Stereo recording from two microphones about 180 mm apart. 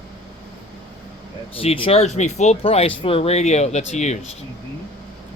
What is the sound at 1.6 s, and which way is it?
Speech, 30° left (ahead or behind).